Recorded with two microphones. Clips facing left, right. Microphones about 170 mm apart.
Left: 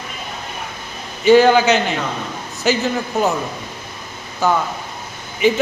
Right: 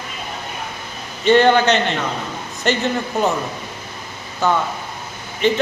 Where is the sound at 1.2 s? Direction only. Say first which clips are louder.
Left 2 dB; 5° left (ahead or behind).